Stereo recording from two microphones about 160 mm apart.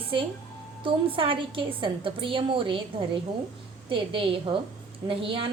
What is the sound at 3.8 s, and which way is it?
A woman's voice, 30° right (ahead or behind).